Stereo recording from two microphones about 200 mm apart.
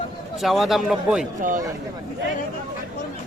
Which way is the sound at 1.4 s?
40° right (ahead or behind).